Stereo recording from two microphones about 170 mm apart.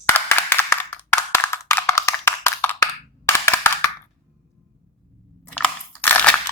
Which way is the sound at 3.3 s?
15° left (ahead or behind).